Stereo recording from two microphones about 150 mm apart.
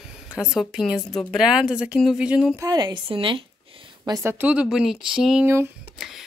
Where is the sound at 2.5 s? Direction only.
25° right (ahead or behind).